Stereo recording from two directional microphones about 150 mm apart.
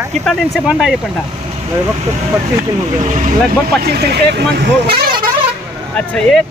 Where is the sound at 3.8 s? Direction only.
90° right.